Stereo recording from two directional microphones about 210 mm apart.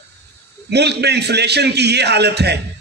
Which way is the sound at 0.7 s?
50° right (ahead or behind).